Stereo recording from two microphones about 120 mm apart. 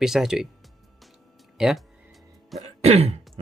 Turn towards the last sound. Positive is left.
turn(degrees=-60)  # may be behind; listen again after turning